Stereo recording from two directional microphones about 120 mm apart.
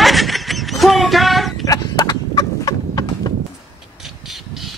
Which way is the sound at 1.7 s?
30° left (ahead or behind).